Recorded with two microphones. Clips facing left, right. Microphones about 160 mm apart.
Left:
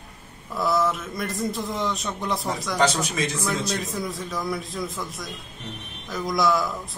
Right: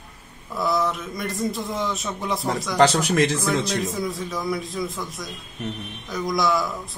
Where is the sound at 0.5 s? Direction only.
Centre (ahead or behind).